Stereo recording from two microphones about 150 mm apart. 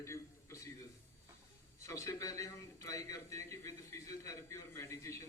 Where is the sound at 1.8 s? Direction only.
20° left (ahead or behind).